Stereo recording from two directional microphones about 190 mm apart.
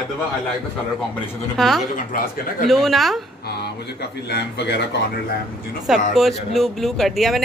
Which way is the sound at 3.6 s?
60° left (ahead or behind).